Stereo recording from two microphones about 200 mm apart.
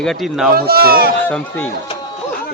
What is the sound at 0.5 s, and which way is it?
Speech, 50° right (ahead or behind).